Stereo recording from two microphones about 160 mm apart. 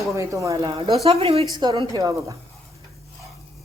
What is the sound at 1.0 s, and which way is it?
Speech, 40° right (ahead or behind).